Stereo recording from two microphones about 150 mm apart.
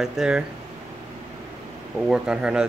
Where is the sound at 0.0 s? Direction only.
5° right (ahead or behind).